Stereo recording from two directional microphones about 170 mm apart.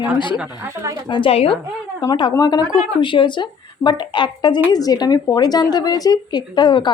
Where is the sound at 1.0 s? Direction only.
30° left (ahead or behind).